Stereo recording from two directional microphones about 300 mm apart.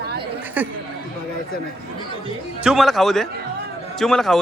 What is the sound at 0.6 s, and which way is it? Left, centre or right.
Speech, centre.